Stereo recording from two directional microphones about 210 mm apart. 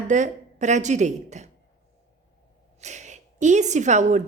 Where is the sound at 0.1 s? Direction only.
35° right (ahead or behind).